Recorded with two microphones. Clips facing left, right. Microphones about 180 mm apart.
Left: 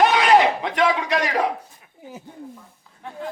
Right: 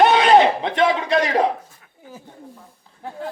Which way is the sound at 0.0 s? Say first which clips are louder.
Right 3 dB; 25° right (ahead or behind).